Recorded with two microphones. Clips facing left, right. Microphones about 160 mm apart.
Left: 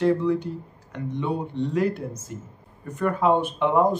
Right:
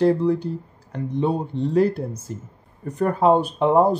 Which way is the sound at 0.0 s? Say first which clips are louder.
Right 3 dB; 35° right (ahead or behind).